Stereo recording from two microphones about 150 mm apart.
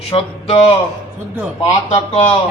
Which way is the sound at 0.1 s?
40° left (ahead or behind).